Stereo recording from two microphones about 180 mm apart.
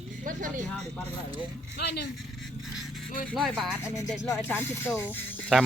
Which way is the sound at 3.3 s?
Centre (ahead or behind).